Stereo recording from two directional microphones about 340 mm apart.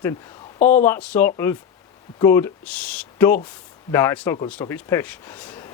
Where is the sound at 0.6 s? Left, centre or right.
Left.